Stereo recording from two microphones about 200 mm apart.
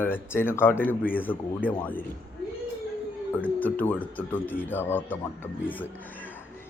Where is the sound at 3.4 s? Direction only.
10° left (ahead or behind).